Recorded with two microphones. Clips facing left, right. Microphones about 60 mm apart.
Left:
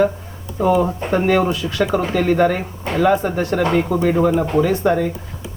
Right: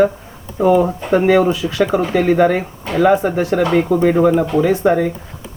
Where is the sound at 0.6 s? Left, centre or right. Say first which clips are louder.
Right 3 dB; centre.